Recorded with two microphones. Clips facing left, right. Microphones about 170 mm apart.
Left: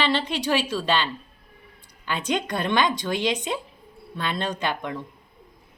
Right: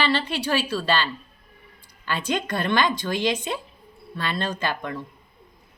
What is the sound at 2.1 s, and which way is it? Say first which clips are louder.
A woman's voice: even; 15° left (ahead or behind).